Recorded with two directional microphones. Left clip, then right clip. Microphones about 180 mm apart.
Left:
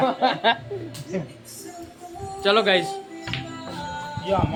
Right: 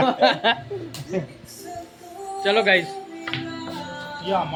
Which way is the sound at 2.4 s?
30° left (ahead or behind).